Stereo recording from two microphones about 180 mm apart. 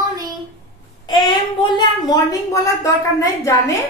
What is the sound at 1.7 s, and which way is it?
A woman's voice, 25° left (ahead or behind).